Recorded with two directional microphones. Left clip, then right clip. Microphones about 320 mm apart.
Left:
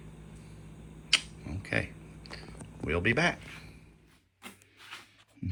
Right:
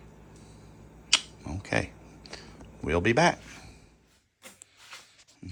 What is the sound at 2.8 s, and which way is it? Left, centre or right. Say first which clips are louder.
Speech: right 4 dB; centre.